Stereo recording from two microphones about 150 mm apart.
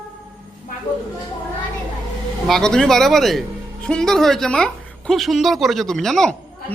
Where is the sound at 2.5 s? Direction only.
5° left (ahead or behind).